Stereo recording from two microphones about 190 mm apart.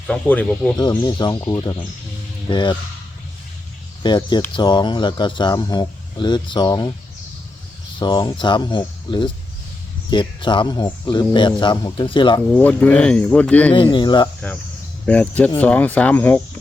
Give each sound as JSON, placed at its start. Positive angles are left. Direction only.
{"t": 0.1, "sound": "speech", "side_deg": 5}
{"t": 0.8, "sound": "speech", "side_deg": 20}
{"t": 4.0, "sound": "speech", "side_deg": 25}
{"t": 7.9, "sound": "speech", "side_deg": 25}
{"t": 12.5, "sound": "speech", "side_deg": 10}
{"t": 13.9, "sound": "speech", "side_deg": 25}
{"t": 15.0, "sound": "speech", "side_deg": 5}